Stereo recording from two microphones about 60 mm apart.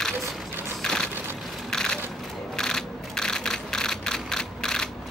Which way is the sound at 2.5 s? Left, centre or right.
Centre.